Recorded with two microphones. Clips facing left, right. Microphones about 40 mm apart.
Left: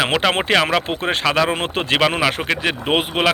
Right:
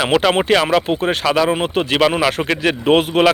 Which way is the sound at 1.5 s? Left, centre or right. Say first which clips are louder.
Right 3 dB; left.